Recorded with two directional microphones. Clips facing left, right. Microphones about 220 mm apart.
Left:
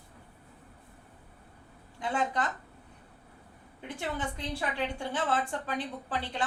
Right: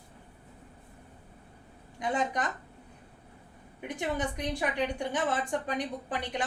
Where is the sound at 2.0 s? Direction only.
15° right (ahead or behind).